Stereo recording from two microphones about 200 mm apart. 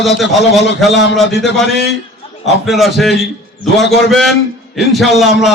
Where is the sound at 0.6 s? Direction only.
60° left (ahead or behind).